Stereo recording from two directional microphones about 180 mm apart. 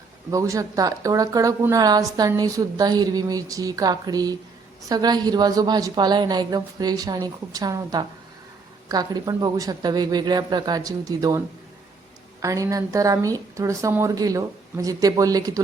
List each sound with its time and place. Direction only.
0.3 s a woman's voice: 20° right (ahead or behind)